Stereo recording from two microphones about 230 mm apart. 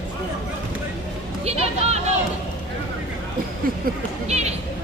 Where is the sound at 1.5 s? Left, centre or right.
Right.